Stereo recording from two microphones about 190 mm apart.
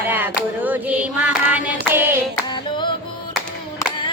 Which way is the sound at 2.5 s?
25° left (ahead or behind).